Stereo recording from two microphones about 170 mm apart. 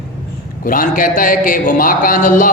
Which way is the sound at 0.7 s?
55° left (ahead or behind).